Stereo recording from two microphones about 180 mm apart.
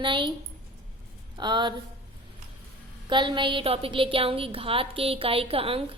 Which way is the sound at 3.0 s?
25° right (ahead or behind).